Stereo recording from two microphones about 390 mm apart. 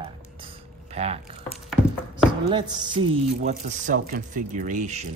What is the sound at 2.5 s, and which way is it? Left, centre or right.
Speech, centre.